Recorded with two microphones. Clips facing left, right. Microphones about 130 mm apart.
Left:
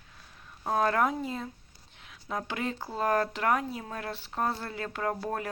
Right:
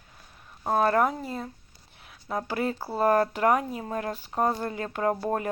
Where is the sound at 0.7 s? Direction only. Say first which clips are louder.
Right 3 dB; 10° right (ahead or behind).